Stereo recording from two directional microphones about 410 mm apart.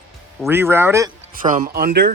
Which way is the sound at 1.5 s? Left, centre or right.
Centre.